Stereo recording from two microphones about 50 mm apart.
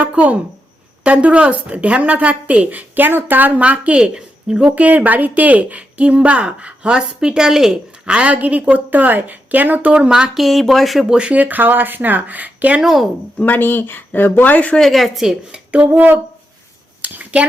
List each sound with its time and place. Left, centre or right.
0.0 s a woman's voice: right; by 7.8 s centre
8.0 s a woman's voice: right
9.9 s speech: centre
10.3 s speech: centre
11.1 s a woman's voice: right
11.3 s a woman's voice: right
12.8 s speech: centre
13.4 s speech: left
14.8 s speech: centre
15.5 s a woman's voice: right
17.0 s a sound: right